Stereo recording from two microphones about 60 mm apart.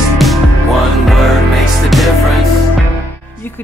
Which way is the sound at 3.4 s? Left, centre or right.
Left.